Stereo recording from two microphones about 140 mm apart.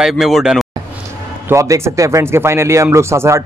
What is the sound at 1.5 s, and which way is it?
Speech, 20° right (ahead or behind).